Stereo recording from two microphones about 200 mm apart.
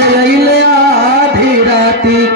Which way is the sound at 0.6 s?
55° right (ahead or behind).